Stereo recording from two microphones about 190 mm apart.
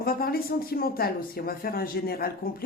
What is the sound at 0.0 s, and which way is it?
Speech, 50° left (ahead or behind).